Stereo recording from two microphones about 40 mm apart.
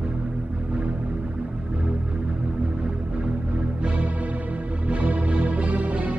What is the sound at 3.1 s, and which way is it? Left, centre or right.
Music, right.